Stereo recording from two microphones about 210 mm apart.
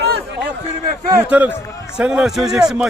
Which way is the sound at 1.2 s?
5° right (ahead or behind).